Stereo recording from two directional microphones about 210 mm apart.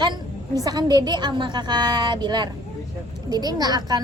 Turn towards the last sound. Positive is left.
turn(degrees=-20)  # may be behind; listen again after turning